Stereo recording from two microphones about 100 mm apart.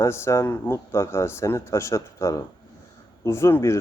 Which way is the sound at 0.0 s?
30° left (ahead or behind).